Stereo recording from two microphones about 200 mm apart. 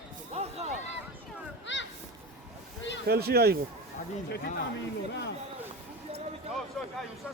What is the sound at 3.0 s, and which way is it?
Speech, 50° right (ahead or behind).